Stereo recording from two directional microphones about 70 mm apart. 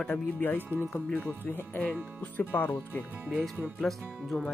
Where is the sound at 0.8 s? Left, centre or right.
Left.